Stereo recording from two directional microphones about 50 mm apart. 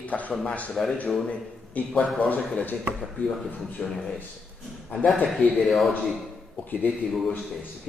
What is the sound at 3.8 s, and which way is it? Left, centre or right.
Speech, centre.